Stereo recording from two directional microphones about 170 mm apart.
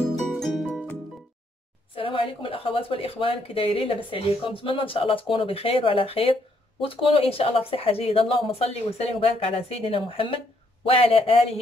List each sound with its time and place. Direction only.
0.4 s music: 5° left (ahead or behind)
2.0 s speech: 30° left (ahead or behind)